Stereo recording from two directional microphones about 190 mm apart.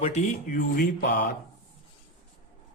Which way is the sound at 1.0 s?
55° left (ahead or behind).